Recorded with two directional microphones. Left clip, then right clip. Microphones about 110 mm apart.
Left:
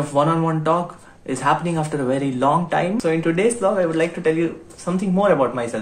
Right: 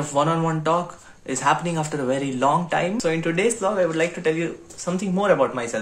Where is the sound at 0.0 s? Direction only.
15° right (ahead or behind).